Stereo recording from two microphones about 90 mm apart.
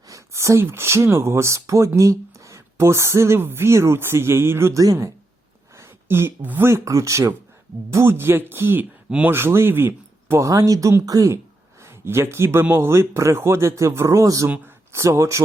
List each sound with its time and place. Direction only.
0.1 s speech: 35° right (ahead or behind)
9.0 s speech: 10° right (ahead or behind)
9.3 s speech: 25° right (ahead or behind)
11.8 s speech: 30° right (ahead or behind)